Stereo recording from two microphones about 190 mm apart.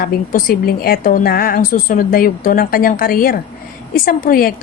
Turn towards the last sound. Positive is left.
turn(degrees=50)  # may be behind; listen again after turning